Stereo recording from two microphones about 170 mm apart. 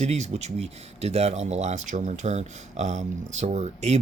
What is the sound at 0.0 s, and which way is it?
Speech, 40° right (ahead or behind).